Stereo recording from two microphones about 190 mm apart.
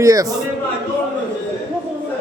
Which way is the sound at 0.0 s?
15° right (ahead or behind).